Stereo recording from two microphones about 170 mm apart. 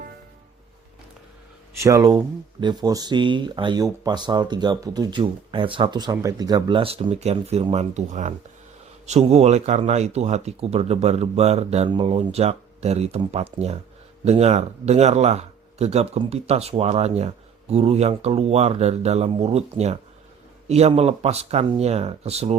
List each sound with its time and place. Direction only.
1.8 s speech: 20° right (ahead or behind); by 22.5 s 40° right (ahead or behind)